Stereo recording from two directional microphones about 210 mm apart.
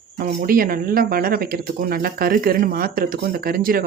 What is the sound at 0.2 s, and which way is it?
Speech, 45° right (ahead or behind).